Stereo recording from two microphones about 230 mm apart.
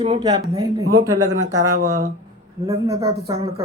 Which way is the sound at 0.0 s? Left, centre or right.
Centre.